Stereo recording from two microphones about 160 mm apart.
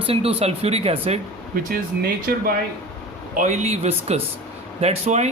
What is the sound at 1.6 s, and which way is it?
Speech, 65° right (ahead or behind).